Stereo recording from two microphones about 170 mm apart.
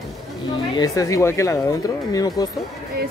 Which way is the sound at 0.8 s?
20° left (ahead or behind).